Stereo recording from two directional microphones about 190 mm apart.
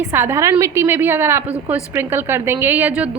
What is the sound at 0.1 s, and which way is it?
A woman's voice, 10° right (ahead or behind).